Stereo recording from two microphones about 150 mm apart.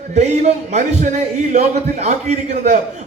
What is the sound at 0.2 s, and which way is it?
A man's voice, 50° right (ahead or behind).